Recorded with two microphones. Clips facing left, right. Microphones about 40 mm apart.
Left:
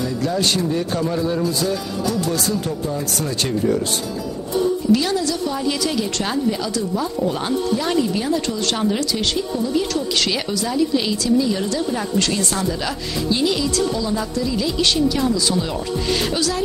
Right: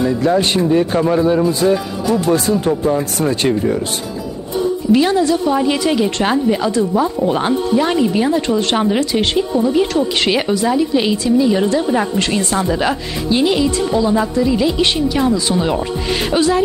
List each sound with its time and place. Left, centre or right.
0.0 s a woman's voice: right
4.9 s a woman's voice: right